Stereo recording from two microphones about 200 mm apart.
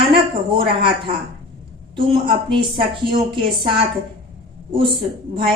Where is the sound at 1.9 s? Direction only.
25° right (ahead or behind).